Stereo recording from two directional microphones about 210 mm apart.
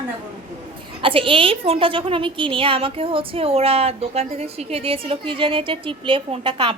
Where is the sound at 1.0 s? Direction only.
25° right (ahead or behind).